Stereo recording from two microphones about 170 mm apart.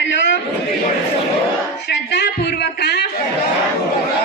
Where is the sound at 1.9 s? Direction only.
85° left.